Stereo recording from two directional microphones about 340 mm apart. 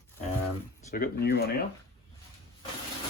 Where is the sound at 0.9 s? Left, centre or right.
Left.